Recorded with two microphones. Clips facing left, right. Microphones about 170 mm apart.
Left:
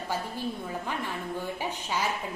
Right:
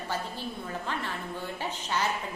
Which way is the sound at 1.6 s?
10° left (ahead or behind).